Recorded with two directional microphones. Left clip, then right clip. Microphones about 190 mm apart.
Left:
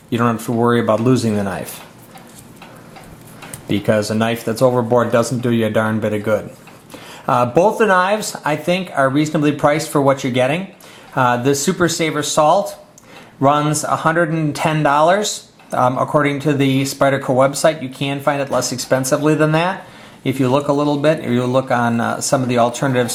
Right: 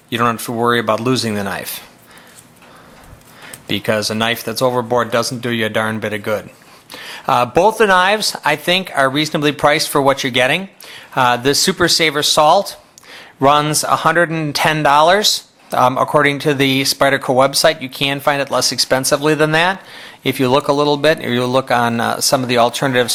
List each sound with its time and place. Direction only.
0.5 s speech: 15° right (ahead or behind)
3.7 s speech: 10° right (ahead or behind)
4.7 s a man's voice: 25° right (ahead or behind)
4.9 s a man's voice: 10° right (ahead or behind)